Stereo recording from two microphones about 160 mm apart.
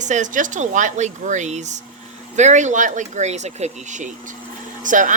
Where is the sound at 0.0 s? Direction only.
50° right (ahead or behind).